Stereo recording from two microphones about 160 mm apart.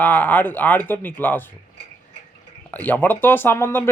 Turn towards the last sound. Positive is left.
turn(degrees=15)  # may be behind; listen again after turning